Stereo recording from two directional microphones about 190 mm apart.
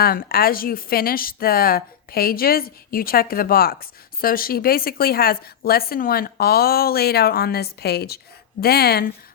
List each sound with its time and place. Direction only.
0.0 s a woman's voice: 55° left (ahead or behind)